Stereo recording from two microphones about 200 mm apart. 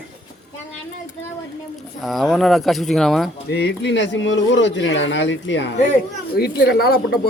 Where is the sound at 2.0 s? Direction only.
Centre (ahead or behind).